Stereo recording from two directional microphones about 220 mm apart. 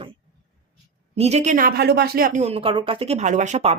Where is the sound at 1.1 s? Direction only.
30° right (ahead or behind).